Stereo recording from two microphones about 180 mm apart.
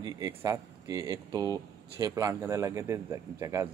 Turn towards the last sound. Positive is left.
turn(degrees=-15)  # may be behind; listen again after turning